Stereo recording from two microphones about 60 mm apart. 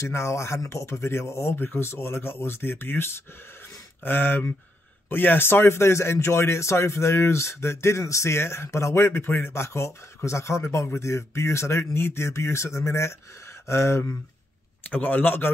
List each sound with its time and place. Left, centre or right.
0.0 s speech: left
14.9 s speech: left